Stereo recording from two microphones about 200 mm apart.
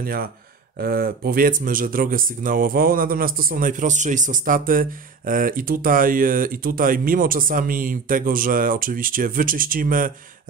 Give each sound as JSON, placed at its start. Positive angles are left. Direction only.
{"t": 0.0, "sound": "speech", "side_deg": -50}